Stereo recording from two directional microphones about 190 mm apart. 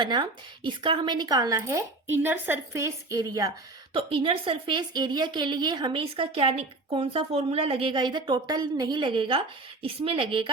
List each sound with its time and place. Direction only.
0.0 s a woman's voice: 25° right (ahead or behind)